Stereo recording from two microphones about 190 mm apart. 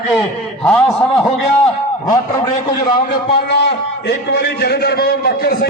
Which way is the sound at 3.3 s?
60° left (ahead or behind).